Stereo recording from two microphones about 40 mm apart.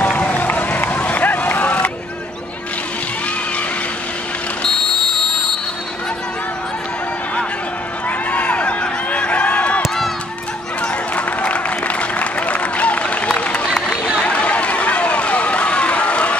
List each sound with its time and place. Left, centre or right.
0.0 s run: left
8.3 s a sound: left
9.8 s run: centre
10.8 s applause: left
14.2 s run: left